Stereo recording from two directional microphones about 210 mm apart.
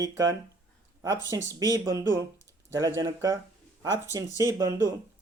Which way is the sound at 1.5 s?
15° right (ahead or behind).